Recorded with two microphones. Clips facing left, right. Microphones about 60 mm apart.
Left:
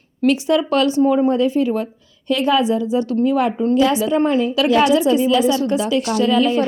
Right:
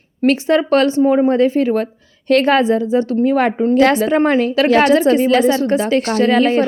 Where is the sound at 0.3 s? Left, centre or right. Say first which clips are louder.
Right 3 dB; right.